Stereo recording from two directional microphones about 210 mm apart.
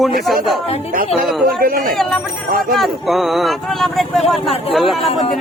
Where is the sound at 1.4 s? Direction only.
45° right (ahead or behind).